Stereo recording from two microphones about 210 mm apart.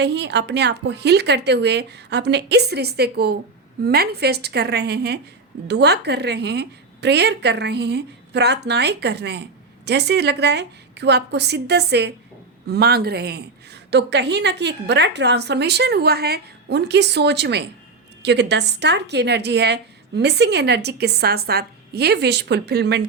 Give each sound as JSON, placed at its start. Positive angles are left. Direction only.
{"t": 0.0, "sound": "a woman's voice", "side_deg": -55}